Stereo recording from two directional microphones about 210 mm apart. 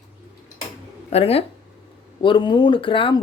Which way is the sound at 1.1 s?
30° left (ahead or behind).